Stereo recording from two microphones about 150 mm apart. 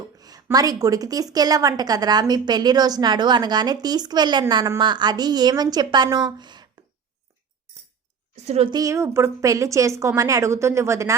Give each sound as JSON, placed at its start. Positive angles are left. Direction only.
{"t": 0.2, "sound": "a sound", "side_deg": -25}
{"t": 0.5, "sound": "a woman's voice", "side_deg": -25}
{"t": 8.4, "sound": "a woman's voice", "side_deg": -40}
{"t": 8.7, "sound": "a woman's voice", "side_deg": -20}